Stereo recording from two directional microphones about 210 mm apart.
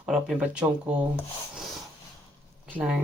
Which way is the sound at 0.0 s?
Centre (ahead or behind).